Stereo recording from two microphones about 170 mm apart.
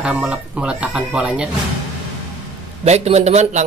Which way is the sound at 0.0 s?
5° right (ahead or behind).